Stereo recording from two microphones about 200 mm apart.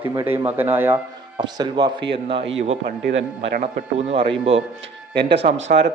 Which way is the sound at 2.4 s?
70° right (ahead or behind).